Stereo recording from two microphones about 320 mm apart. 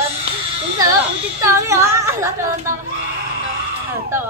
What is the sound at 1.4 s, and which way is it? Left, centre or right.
A woman's voice, centre.